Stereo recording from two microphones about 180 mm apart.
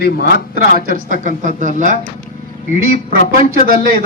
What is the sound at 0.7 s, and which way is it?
A man's voice, 50° right (ahead or behind).